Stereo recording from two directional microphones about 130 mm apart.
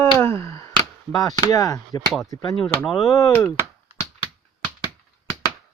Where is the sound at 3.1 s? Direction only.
25° left (ahead or behind).